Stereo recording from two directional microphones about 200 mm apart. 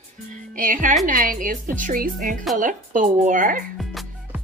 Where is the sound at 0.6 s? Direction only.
45° right (ahead or behind).